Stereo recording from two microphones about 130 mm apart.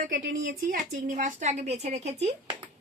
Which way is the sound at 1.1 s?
75° right (ahead or behind).